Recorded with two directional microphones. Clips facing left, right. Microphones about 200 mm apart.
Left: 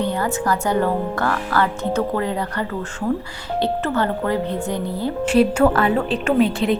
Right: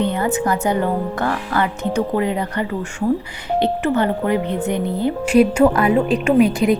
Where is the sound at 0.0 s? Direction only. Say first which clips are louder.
Right 2 dB; 20° right (ahead or behind).